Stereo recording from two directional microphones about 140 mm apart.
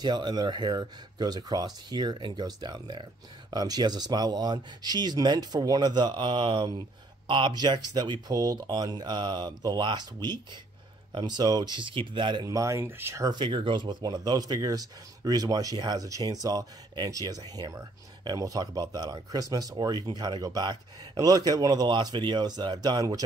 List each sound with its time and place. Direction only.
0.0 s speech: 30° right (ahead or behind)
12.4 s speech: 20° right (ahead or behind)